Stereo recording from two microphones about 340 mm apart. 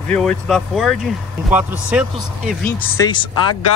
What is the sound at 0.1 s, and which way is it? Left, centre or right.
Speech, centre.